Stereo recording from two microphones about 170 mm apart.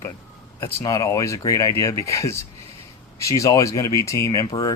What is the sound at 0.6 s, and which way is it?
Speech, 20° left (ahead or behind).